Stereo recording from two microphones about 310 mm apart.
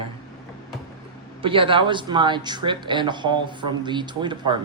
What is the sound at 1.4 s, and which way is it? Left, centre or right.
Speech, centre.